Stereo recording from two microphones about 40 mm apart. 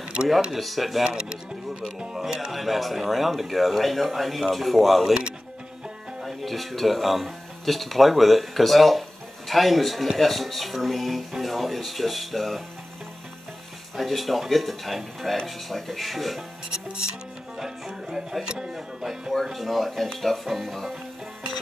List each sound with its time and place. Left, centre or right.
0.1 s speech: right
0.6 s speech: centre
1.0 s speech: centre
6.2 s speech: centre
13.9 s speech: centre
17.6 s speech: centre
19.4 s speech: centre